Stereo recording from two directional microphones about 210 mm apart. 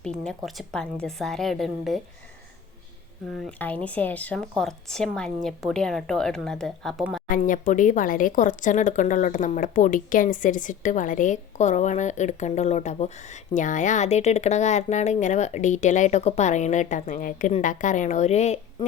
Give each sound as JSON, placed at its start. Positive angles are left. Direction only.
{"t": 0.0, "sound": "speech", "side_deg": 0}
{"t": 3.3, "sound": "speech", "side_deg": 5}
{"t": 7.3, "sound": "speech", "side_deg": 40}